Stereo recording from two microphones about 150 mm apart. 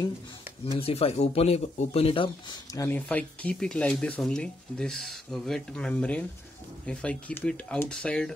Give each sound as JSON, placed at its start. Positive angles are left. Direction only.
{"t": 0.7, "sound": "speech", "side_deg": 40}
{"t": 2.9, "sound": "speech", "side_deg": 10}